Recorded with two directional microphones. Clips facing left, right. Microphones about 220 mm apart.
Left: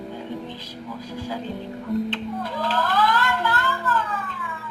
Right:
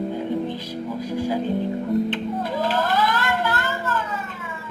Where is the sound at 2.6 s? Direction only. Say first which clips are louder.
Even; 15° right (ahead or behind).